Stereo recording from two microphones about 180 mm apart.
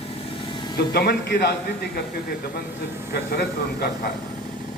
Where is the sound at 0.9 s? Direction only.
60° left (ahead or behind).